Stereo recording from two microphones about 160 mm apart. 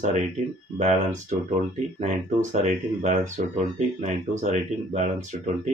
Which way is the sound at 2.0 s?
45° right (ahead or behind).